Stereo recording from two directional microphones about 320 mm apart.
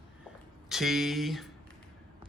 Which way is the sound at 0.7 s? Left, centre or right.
Centre.